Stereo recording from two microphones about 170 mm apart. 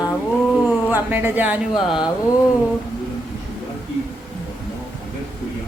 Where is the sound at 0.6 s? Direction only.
10° right (ahead or behind).